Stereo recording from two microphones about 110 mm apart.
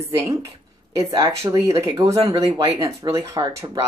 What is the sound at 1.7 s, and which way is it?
Speech, 30° right (ahead or behind).